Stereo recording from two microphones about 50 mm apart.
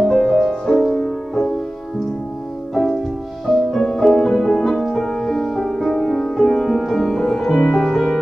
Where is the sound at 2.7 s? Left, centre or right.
Centre.